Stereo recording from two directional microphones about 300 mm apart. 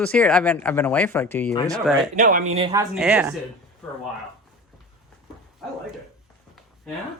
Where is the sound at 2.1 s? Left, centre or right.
Right.